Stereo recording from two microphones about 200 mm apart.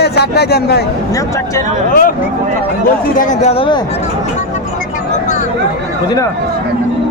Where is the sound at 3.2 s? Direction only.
35° left (ahead or behind).